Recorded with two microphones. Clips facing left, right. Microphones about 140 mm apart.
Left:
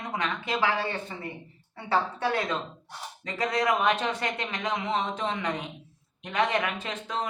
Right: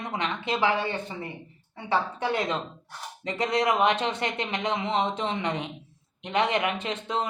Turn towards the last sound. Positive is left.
turn(degrees=-25)  # may be behind; listen again after turning